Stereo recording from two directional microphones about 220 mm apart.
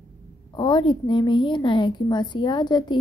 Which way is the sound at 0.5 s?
20° left (ahead or behind).